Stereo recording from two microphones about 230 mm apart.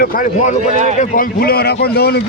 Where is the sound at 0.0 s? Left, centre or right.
Left.